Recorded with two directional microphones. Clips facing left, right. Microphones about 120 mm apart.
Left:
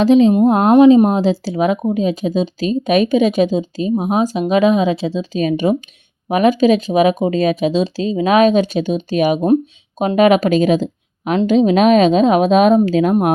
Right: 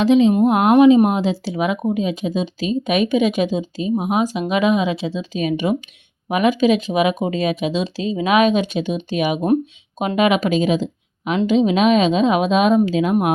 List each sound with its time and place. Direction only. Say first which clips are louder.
0.0 s speech: left 3 dB; 40° left (ahead or behind)